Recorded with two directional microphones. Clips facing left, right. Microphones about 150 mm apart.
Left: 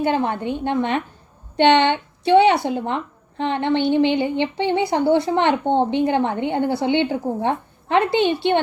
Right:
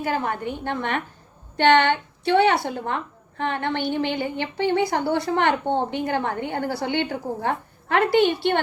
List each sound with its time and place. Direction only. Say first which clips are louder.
0.0 s a woman's voice: left 5 dB; 25° left (ahead or behind)